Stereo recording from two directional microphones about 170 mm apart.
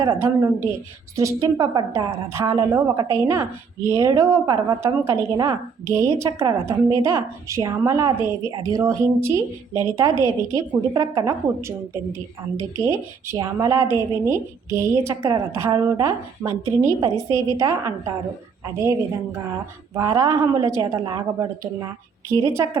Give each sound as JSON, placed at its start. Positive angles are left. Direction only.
{"t": 0.0, "sound": "a woman's voice", "side_deg": -15}
{"t": 12.5, "sound": "a woman's voice", "side_deg": -15}